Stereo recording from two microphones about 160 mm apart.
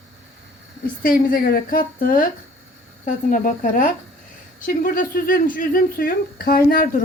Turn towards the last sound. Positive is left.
turn(degrees=65)  # may be behind; listen again after turning